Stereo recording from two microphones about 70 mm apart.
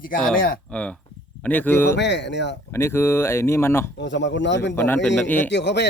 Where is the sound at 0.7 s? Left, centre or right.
Centre; by 4.9 s left.